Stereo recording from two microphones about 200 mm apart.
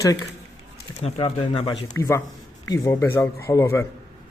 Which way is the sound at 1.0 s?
30° left (ahead or behind).